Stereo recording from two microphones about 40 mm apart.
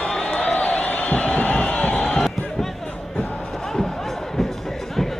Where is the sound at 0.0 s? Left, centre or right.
Left.